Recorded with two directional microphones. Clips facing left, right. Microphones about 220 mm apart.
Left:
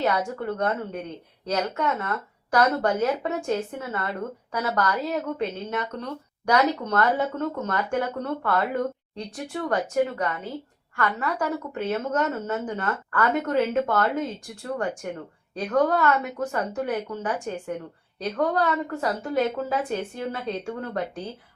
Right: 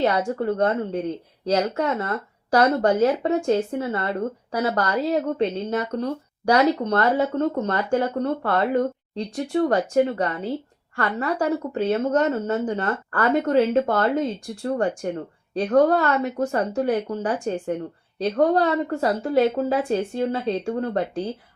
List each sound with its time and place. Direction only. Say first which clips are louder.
0.0 s speech: right 4 dB; 30° right (ahead or behind)